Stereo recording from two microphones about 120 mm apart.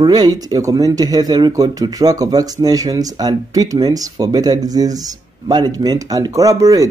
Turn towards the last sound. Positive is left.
turn(degrees=-30)  # may be behind; listen again after turning